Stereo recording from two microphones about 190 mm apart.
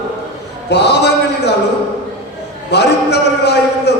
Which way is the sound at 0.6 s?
65° left (ahead or behind).